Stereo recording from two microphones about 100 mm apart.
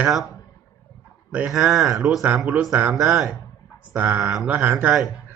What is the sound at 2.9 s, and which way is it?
Speech, centre (ahead or behind).